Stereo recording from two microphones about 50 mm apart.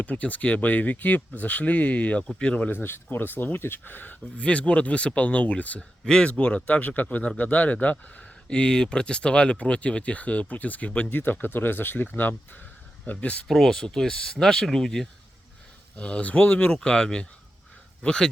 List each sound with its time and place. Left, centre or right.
0.0 s speech: left
2.8 s speech: left
4.4 s speech: left
6.1 s speech: centre
6.3 s speech: left
8.4 s speech: centre
11.3 s speech: left
13.1 s speech: left
13.5 s speech: centre
16.0 s speech: left